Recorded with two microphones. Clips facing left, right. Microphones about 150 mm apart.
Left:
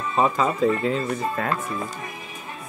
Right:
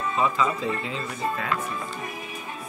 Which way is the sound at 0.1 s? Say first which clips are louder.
Left 4 dB; 45° left (ahead or behind).